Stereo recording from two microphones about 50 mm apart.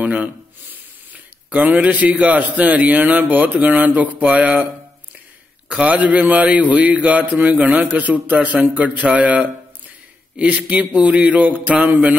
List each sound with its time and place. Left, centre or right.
1.5 s a man's voice: right
5.7 s a man's voice: right